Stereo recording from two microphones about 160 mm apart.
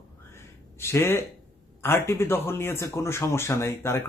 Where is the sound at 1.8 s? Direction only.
15° left (ahead or behind).